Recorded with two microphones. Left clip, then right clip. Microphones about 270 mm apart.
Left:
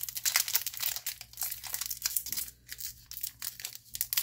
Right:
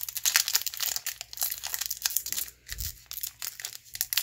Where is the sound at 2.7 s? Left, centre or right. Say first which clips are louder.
Right 5 dB; centre.